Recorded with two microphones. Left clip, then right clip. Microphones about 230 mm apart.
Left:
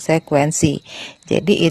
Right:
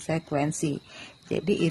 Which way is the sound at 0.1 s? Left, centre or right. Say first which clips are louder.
Left 12 dB; left.